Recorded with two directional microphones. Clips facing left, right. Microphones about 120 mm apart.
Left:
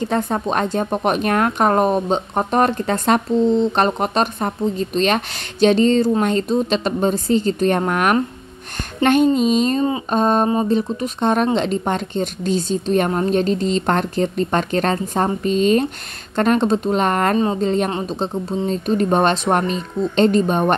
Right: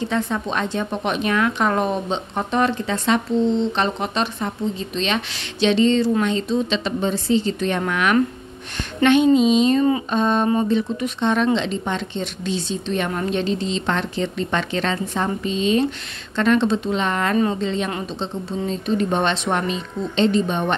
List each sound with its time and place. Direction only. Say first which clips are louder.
0.0 s speech: left 3 dB; 45° left (ahead or behind)
9.8 s speech: right 1 dB; 25° left (ahead or behind)
10.1 s speech: left 2 dB; 40° left (ahead or behind)